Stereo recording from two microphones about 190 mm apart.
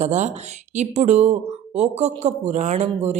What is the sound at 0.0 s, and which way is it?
Speech, 40° right (ahead or behind).